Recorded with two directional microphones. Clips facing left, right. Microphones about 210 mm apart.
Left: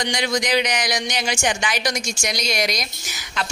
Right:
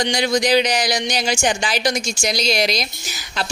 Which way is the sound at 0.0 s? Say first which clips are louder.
Right 4 dB; 35° right (ahead or behind).